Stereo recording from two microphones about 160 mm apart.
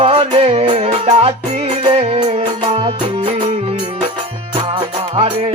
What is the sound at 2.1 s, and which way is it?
Music, 40° right (ahead or behind).